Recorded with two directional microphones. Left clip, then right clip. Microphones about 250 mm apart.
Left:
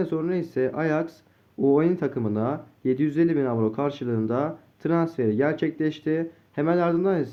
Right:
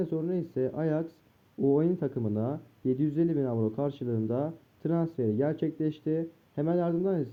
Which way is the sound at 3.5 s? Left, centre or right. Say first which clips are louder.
Left 6 dB; centre.